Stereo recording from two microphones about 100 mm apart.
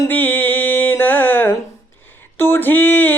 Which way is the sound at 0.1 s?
15° left (ahead or behind).